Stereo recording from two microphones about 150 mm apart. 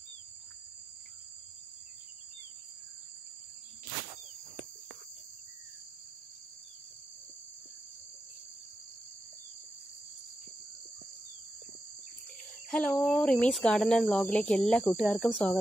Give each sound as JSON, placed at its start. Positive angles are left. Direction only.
{"t": 12.6, "sound": "cricket", "side_deg": 10}
{"t": 13.0, "sound": "speech", "side_deg": 5}